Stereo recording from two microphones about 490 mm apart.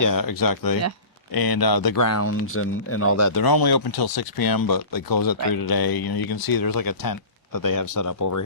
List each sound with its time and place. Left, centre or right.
0.0 s speech: left